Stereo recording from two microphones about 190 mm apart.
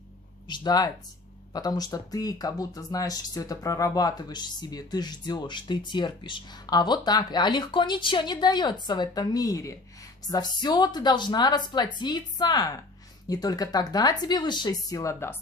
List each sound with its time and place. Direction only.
0.5 s speech: 20° left (ahead or behind)